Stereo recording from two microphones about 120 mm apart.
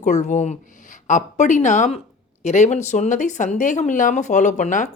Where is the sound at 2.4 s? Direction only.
70° left (ahead or behind); by 4.9 s 90° left.